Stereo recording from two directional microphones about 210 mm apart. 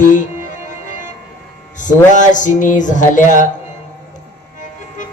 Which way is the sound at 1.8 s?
35° left (ahead or behind).